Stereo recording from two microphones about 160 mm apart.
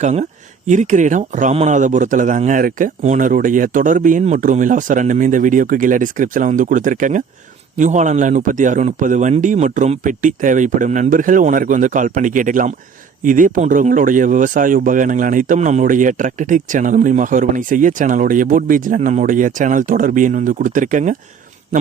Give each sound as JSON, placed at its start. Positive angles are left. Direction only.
{"t": 0.0, "sound": "a man's voice", "side_deg": -45}